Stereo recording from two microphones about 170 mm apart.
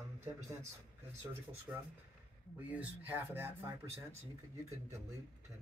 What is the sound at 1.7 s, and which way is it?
Speech, 10° right (ahead or behind).